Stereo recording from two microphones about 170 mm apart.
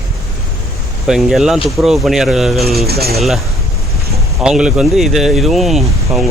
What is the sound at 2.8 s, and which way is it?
Speech, 65° right (ahead or behind).